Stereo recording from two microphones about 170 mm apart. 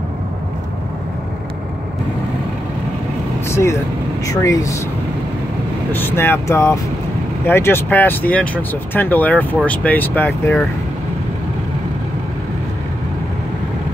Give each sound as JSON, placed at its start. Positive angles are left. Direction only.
{"t": 3.4, "sound": "speech", "side_deg": 15}
{"t": 5.9, "sound": "speech", "side_deg": 10}